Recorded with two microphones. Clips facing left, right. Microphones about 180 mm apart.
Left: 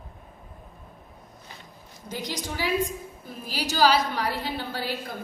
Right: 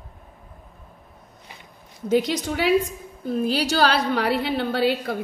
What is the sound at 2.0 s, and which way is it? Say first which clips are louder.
A woman's voice: right 12 dB; 65° right (ahead or behind).